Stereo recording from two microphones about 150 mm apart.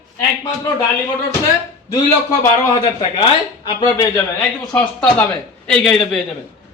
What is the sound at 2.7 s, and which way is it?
Speech, 35° left (ahead or behind).